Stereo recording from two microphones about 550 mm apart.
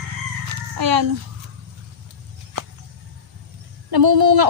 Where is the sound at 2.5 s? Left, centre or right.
Right.